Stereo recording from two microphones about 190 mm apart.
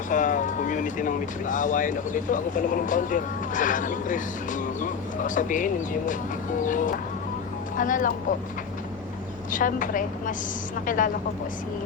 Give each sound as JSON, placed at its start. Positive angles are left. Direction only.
{"t": 0.1, "sound": "speech", "side_deg": 40}
{"t": 9.5, "sound": "speech", "side_deg": 45}